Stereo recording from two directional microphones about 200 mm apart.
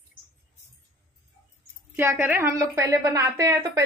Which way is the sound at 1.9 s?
10° right (ahead or behind).